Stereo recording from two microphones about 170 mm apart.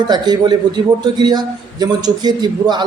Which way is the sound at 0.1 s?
25° right (ahead or behind).